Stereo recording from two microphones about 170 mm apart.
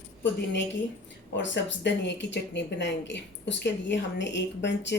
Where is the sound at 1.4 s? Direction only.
90° left.